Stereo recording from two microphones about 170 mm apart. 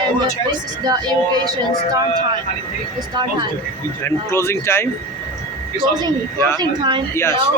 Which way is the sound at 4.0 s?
15° left (ahead or behind).